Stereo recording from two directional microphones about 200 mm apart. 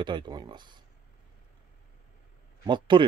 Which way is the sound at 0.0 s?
20° right (ahead or behind).